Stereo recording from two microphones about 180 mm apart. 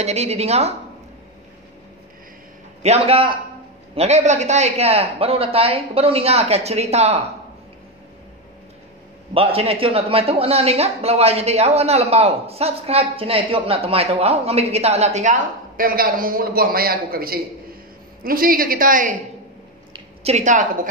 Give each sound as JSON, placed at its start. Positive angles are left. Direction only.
{"t": 0.0, "sound": "a man's voice", "side_deg": -35}
{"t": 2.8, "sound": "a man's voice", "side_deg": -35}
{"t": 9.3, "sound": "a man's voice", "side_deg": -30}
{"t": 19.9, "sound": "a sound", "side_deg": -35}